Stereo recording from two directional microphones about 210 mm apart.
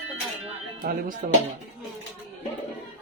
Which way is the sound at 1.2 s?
40° right (ahead or behind).